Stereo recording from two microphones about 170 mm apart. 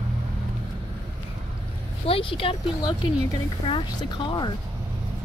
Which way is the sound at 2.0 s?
30° left (ahead or behind).